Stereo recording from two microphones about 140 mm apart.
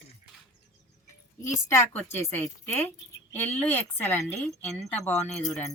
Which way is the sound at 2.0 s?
15° left (ahead or behind).